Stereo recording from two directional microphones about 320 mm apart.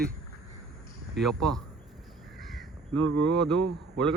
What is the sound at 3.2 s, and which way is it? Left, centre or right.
Speech, right.